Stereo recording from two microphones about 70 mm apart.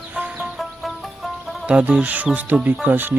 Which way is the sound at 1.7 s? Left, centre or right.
Centre.